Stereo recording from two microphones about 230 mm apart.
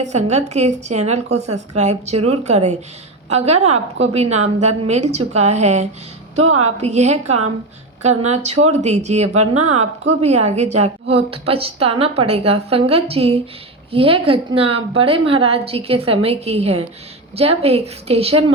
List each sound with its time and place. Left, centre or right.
0.1 s a woman's voice: right
6.3 s a woman's voice: right
6.6 s a woman's voice: right